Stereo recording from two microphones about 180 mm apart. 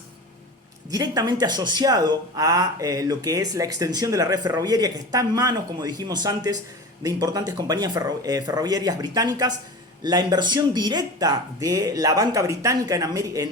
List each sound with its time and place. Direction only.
0.9 s speech: 20° right (ahead or behind)